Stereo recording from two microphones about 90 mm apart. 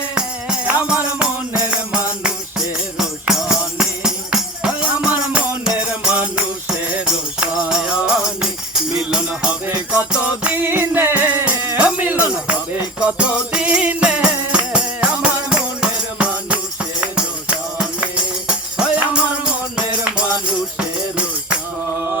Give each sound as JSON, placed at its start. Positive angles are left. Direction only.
{"t": 0.1, "sound": "music", "side_deg": -10}
{"t": 9.6, "sound": "music", "side_deg": -25}